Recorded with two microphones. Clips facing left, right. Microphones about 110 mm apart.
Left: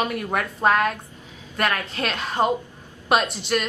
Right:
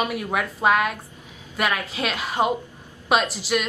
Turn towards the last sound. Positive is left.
turn(degrees=-5)  # may be behind; listen again after turning